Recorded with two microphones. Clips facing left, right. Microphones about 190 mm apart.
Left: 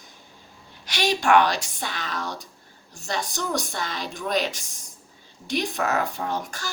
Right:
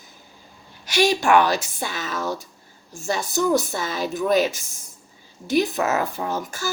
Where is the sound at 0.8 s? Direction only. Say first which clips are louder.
Right 4 dB; 10° right (ahead or behind).